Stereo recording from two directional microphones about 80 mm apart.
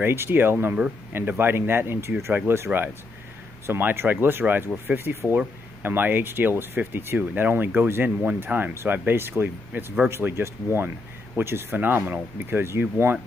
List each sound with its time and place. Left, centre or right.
0.0 s speech: right